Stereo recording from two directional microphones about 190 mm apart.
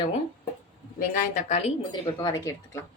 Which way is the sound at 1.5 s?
25° left (ahead or behind).